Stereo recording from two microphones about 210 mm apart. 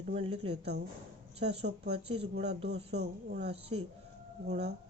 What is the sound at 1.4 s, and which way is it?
Speech, 30° right (ahead or behind).